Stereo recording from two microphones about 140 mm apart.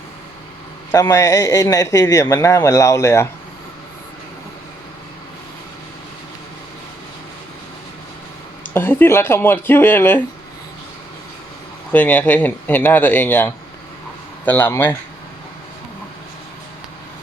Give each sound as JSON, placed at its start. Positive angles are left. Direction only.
{"t": 0.9, "sound": "a man's voice", "side_deg": 25}
{"t": 8.7, "sound": "speech", "side_deg": 15}
{"t": 11.9, "sound": "speech", "side_deg": 10}